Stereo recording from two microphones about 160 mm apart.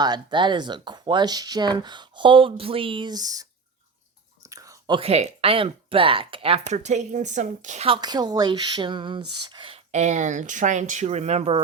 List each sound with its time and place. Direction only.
0.0 s speech: 30° right (ahead or behind)
4.4 s whispering: 20° right (ahead or behind)
4.9 s speech: 40° right (ahead or behind)
7.9 s speech: 25° right (ahead or behind)
9.9 s speech: 45° right (ahead or behind)